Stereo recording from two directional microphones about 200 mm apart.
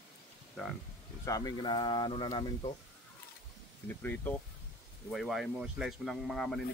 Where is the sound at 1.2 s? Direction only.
15° left (ahead or behind).